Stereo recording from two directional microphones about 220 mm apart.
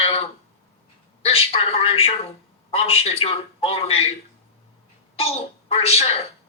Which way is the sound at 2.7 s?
25° left (ahead or behind).